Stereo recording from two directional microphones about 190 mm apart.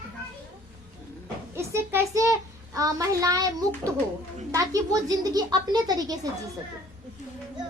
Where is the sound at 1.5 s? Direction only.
15° right (ahead or behind).